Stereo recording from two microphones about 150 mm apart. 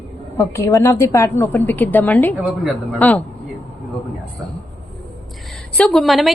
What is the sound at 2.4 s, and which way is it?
Speech, 10° right (ahead or behind).